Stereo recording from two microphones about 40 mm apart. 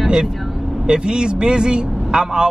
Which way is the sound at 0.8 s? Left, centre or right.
Right.